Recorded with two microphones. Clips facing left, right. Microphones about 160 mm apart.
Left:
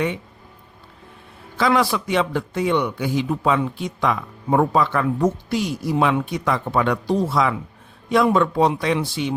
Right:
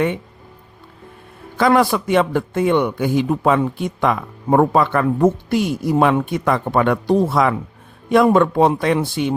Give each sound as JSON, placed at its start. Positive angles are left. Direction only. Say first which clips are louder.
{"t": 1.5, "sound": "a man's voice", "louder": "right 4 dB", "side_deg": -50}